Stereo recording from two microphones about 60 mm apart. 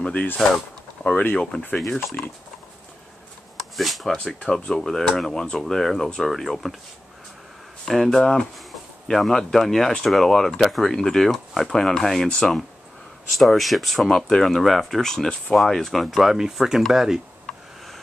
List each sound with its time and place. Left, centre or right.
0.0 s speech: left
1.0 s a sound: left
1.3 s speech: centre
3.7 s speech: centre
4.4 s speech: centre
7.8 s speech: centre